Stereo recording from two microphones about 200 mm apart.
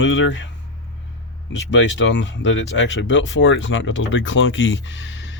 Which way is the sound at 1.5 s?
65° left (ahead or behind).